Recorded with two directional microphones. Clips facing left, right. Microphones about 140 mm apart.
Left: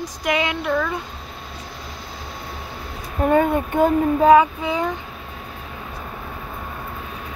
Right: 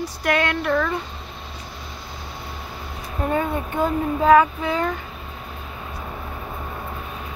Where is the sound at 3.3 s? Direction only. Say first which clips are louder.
Left 6 dB; 55° left (ahead or behind).